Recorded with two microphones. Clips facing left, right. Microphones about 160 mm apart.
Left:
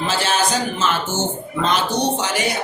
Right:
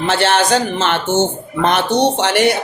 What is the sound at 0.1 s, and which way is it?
Speech, 70° right (ahead or behind).